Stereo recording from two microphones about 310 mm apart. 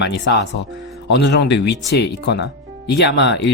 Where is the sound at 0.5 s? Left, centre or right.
Left.